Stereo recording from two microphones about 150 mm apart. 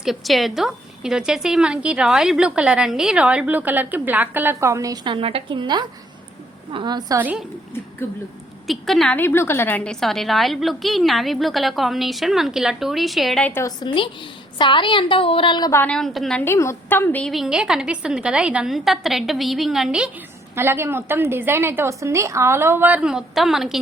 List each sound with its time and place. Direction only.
0.0 s a woman's voice: centre (ahead or behind); by 7.2 s 30° right (ahead or behind)
7.2 s a woman's voice: 10° right (ahead or behind)
8.0 s a woman's voice: 15° left (ahead or behind)
8.6 s a woman's voice: centre (ahead or behind)
9.1 s a woman's voice: 15° left (ahead or behind)
13.5 s a woman's voice: 20° left (ahead or behind)
15.8 s a woman's voice: 5° left (ahead or behind)
16.4 s a woman's voice: 20° left (ahead or behind)
17.3 s a woman's voice: 5° right (ahead or behind)
20.6 s a woman's voice: 15° right (ahead or behind)